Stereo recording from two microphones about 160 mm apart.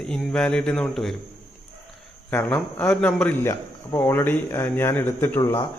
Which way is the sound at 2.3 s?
10° left (ahead or behind).